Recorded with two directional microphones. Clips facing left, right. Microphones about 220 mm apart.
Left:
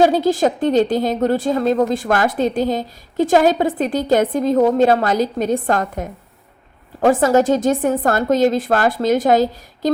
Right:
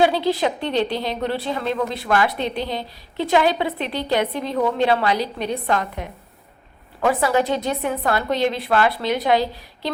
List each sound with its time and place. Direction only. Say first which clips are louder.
0.0 s a woman's voice: left 4 dB; 45° left (ahead or behind)